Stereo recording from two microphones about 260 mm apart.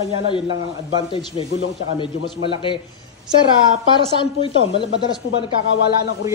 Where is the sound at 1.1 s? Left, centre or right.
Left.